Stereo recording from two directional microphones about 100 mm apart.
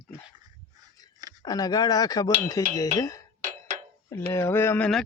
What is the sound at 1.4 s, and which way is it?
Speech, 40° left (ahead or behind).